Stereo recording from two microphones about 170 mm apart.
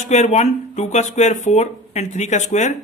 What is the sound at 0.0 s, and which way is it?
Speech, 45° left (ahead or behind).